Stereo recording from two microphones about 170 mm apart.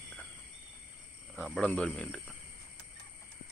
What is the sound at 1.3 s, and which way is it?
Speech, 5° left (ahead or behind).